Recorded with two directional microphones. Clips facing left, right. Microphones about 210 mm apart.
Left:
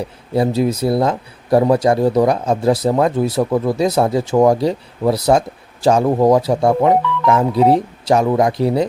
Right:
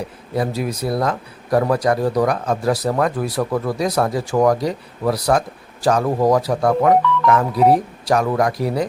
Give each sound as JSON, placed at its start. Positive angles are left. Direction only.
{"t": 0.3, "sound": "speech", "side_deg": 25}